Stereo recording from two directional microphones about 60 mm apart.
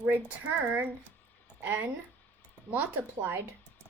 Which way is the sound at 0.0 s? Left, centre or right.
Right.